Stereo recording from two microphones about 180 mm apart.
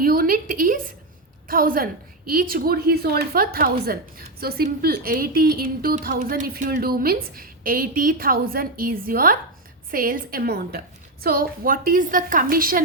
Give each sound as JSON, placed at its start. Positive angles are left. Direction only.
{"t": 0.0, "sound": "a woman's voice", "side_deg": -55}